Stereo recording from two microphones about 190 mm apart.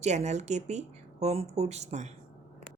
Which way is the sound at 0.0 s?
35° right (ahead or behind).